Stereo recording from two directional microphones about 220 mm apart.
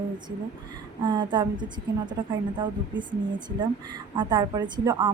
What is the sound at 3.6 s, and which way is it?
A woman's voice, 20° right (ahead or behind).